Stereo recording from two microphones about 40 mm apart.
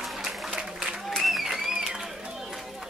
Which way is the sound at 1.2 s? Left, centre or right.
Centre.